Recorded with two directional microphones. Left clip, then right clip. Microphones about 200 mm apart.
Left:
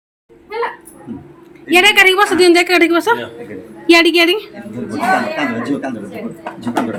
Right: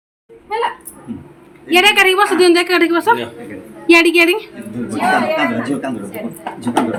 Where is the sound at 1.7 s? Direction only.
5° left (ahead or behind).